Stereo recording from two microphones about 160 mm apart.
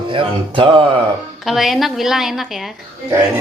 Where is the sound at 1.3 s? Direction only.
Centre (ahead or behind).